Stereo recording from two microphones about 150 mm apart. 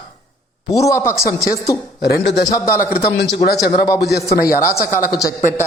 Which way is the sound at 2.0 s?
90° left.